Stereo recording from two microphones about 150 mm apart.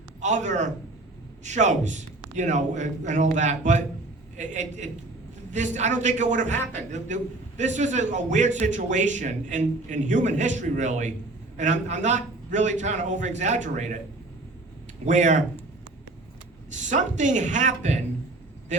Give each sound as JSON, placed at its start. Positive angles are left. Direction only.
{"t": 0.2, "sound": "a man's voice", "side_deg": -55}
{"t": 15.0, "sound": "a man's voice", "side_deg": -55}
{"t": 16.7, "sound": "speech", "side_deg": -55}
{"t": 18.7, "sound": "a sound", "side_deg": -55}